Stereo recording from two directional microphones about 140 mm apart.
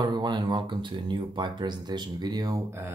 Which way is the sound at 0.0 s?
30° right (ahead or behind).